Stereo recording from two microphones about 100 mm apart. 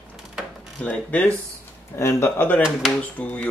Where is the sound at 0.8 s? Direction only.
15° left (ahead or behind).